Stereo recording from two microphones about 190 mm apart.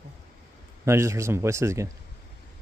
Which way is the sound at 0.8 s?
15° right (ahead or behind).